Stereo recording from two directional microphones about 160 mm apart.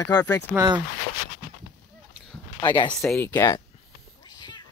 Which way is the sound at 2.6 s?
30° left (ahead or behind).